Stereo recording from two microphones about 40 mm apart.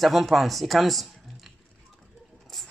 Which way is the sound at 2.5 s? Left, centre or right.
Centre.